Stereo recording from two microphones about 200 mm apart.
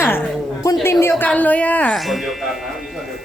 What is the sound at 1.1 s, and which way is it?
Speech, 5° left (ahead or behind).